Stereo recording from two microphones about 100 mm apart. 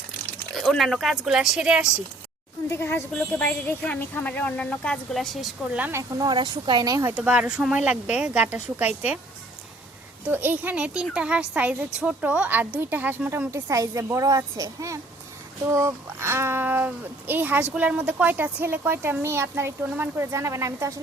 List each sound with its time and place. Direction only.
0.5 s speech: centre (ahead or behind)
2.6 s speech: 25° left (ahead or behind)
3.2 s a woman's voice: 10° left (ahead or behind)
5.1 s speech: centre (ahead or behind)
5.9 s speech: 35° right (ahead or behind)
7.1 s speech: 15° right (ahead or behind)
10.3 s speech: 20° right (ahead or behind)
13.5 s speech: 30° right (ahead or behind)